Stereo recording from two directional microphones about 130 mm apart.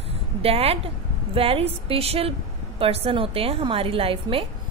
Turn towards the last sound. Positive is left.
turn(degrees=-45)  # may be behind; listen again after turning